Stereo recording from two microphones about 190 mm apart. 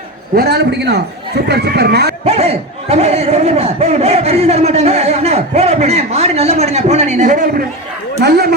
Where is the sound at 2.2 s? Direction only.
35° right (ahead or behind).